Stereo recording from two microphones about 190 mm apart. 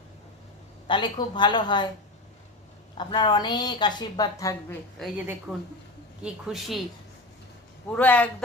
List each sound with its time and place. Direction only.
0.9 s a woman's voice: 25° left (ahead or behind)
3.0 s a woman's voice: 25° left (ahead or behind)
4.9 s a woman's voice: 5° right (ahead or behind)
7.9 s a man's voice: 10° left (ahead or behind)